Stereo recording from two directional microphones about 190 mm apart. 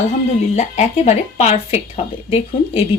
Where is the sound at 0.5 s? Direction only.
35° left (ahead or behind).